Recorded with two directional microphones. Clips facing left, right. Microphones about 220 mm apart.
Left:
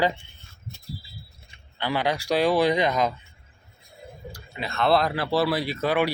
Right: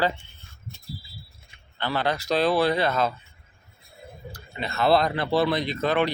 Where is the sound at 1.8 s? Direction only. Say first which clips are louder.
Left 1 dB; 10° left (ahead or behind).